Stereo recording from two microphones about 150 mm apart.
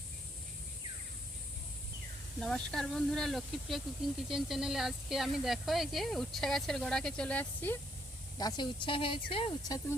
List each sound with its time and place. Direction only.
2.4 s speech: 5° left (ahead or behind)
8.4 s speech: 30° left (ahead or behind)